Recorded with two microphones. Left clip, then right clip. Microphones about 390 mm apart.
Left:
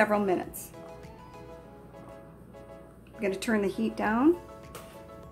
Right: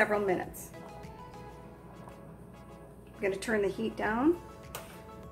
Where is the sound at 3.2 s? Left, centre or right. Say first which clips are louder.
Left 1 dB; centre.